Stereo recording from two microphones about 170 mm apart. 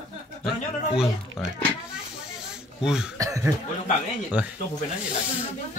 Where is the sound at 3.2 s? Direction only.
20° right (ahead or behind).